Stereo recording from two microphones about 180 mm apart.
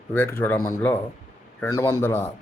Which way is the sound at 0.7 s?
10° left (ahead or behind).